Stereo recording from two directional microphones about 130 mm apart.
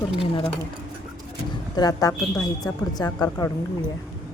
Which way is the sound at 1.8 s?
30° left (ahead or behind).